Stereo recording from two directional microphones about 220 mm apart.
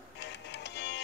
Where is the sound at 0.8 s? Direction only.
50° left (ahead or behind).